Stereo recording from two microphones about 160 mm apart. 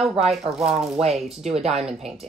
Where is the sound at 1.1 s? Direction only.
Centre (ahead or behind).